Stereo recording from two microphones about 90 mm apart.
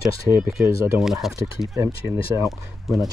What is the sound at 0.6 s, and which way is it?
Speech, 30° right (ahead or behind).